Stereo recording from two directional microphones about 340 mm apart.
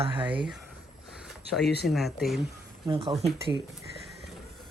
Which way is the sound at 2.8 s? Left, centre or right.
Centre.